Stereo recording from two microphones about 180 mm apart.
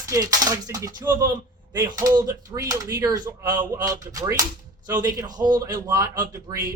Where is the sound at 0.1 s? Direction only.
20° right (ahead or behind).